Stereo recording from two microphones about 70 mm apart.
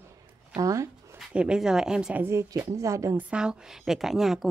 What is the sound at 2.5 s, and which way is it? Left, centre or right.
Speech, right.